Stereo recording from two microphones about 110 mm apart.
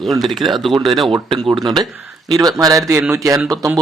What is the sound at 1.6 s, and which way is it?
A man's voice, 40° right (ahead or behind).